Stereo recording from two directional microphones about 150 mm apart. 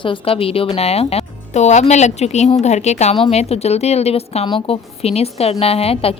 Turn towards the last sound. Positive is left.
turn(degrees=40)  # may be behind; listen again after turning